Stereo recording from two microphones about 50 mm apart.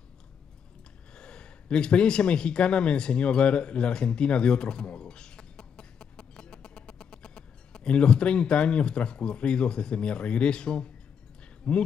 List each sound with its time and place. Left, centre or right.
1.1 s speech: centre